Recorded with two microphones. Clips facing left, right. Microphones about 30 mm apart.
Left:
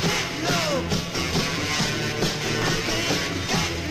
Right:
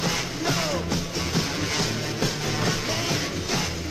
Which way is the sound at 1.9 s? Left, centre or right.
Centre.